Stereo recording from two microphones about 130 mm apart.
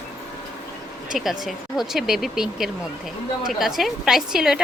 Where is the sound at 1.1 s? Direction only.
Centre (ahead or behind).